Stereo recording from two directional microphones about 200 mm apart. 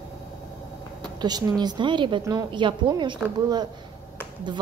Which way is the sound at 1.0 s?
20° right (ahead or behind).